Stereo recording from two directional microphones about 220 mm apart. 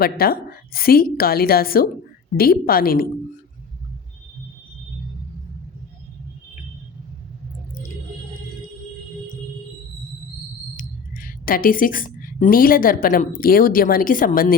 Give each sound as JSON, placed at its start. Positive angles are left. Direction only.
{"t": 0.0, "sound": "a woman's voice", "side_deg": 45}
{"t": 10.8, "sound": "speech", "side_deg": 40}